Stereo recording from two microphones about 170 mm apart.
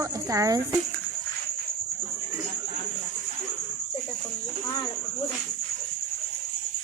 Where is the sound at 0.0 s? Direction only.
20° right (ahead or behind).